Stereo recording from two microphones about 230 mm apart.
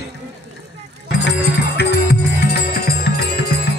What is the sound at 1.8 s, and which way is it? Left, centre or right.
Music, left.